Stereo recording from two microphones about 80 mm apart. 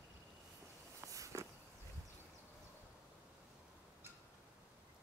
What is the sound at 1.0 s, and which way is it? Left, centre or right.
Walk, right.